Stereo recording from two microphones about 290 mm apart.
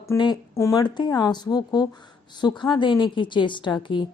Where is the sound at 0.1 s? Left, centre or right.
Centre.